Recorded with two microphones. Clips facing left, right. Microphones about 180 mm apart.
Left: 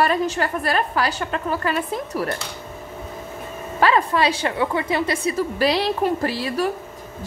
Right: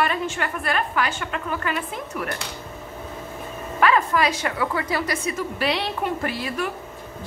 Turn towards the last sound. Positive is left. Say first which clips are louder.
# left 4 dB
turn(degrees=30)  # may be behind; listen again after turning